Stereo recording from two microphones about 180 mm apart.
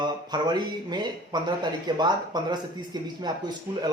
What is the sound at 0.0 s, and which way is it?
Speech, 25° right (ahead or behind).